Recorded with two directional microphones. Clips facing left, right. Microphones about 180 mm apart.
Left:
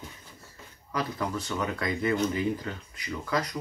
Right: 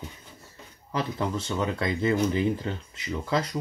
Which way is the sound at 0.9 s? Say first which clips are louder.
Right 2 dB; 25° right (ahead or behind).